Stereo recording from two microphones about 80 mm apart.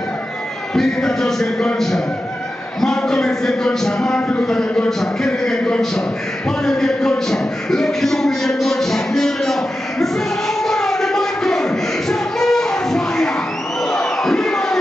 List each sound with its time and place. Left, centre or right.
0.7 s a man's voice: centre
10.6 s a sound: centre
13.8 s crowd: centre